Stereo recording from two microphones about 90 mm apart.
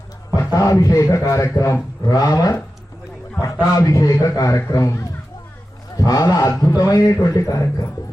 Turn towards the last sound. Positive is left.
turn(degrees=40)  # may be behind; listen again after turning